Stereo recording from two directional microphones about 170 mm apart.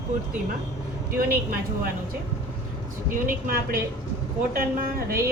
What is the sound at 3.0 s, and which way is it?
Speech, 50° right (ahead or behind).